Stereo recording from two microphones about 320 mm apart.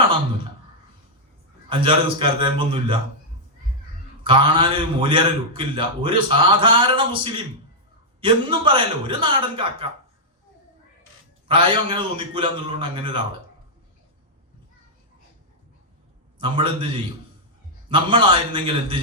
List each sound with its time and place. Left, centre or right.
1.7 s a man's voice: centre
4.2 s a man's voice: centre
11.4 s a man's voice: centre
16.4 s a man's voice: centre